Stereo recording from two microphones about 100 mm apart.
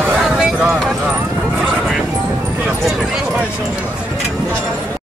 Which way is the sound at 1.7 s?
Centre (ahead or behind).